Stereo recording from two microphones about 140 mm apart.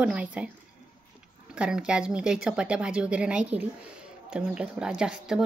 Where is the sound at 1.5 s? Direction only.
5° right (ahead or behind).